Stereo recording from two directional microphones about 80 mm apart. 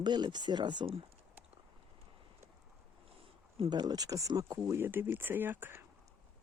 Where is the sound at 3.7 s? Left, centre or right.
Right.